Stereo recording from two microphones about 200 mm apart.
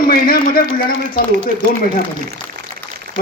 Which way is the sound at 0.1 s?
45° left (ahead or behind).